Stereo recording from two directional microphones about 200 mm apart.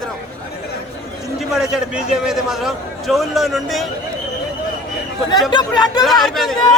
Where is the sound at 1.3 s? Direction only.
Centre (ahead or behind).